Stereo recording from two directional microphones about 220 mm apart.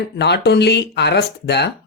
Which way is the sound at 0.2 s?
50° left (ahead or behind).